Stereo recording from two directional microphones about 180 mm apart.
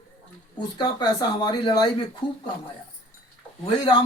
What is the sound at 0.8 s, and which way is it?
A man's voice, 25° left (ahead or behind).